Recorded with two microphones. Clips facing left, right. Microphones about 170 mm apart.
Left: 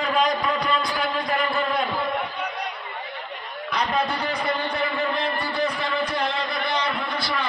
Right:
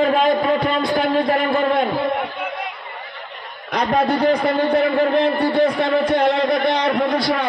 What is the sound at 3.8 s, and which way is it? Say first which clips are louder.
A man's voice: right 12 dB; 55° right (ahead or behind).